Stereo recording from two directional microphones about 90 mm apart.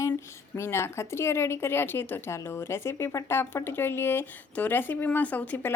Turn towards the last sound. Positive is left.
turn(degrees=15)  # may be behind; listen again after turning